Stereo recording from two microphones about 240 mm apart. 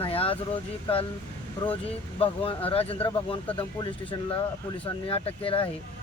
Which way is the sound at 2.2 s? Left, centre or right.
Left.